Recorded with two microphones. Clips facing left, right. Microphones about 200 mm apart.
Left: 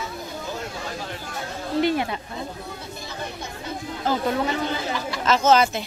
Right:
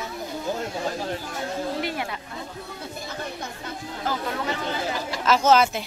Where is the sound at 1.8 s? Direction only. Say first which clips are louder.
Left 7 dB; 25° left (ahead or behind).